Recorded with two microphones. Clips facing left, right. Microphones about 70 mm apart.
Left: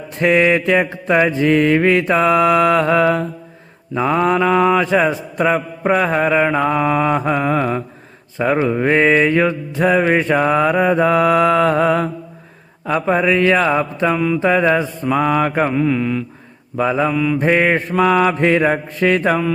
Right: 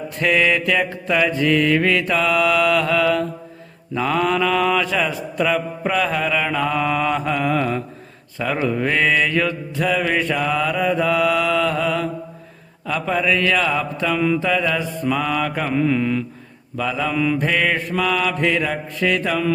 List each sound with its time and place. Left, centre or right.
0.2 s mantra: left
14.2 s speech: centre
14.4 s mantra: left
15.7 s speech: centre
16.7 s mantra: left
17.2 s speech: centre
17.4 s mantra: left